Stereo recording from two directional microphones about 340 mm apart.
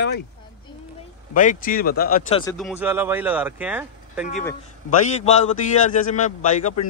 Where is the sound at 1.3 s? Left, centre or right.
Left.